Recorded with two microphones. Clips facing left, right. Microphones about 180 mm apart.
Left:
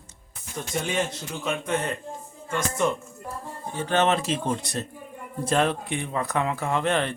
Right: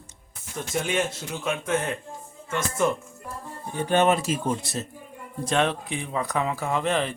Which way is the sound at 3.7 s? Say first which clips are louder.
Right 2 dB; 15° right (ahead or behind).